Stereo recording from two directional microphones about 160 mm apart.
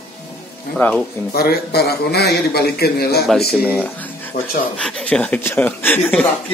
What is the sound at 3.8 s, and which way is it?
Speech, 10° left (ahead or behind).